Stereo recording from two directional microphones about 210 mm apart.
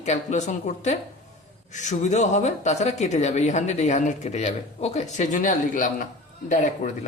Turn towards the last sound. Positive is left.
turn(degrees=35)  # may be behind; listen again after turning